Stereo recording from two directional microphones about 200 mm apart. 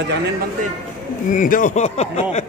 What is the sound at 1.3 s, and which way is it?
Speech, 40° left (ahead or behind).